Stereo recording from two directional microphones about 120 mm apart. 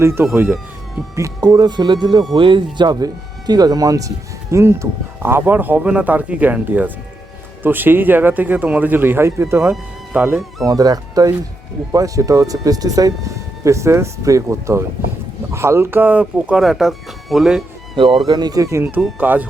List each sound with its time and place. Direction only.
0.0 s speech: 20° right (ahead or behind)
10.6 s speech: 30° right (ahead or behind); by 17.6 s 5° right (ahead or behind)
17.9 s speech: 45° right (ahead or behind); by 19.5 s 15° right (ahead or behind)